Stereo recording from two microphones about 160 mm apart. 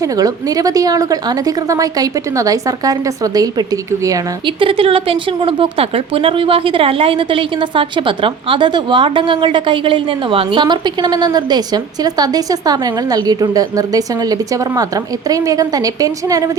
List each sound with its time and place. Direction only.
0.0 s a woman's voice: 25° right (ahead or behind)
4.6 s a woman's voice: 35° right (ahead or behind)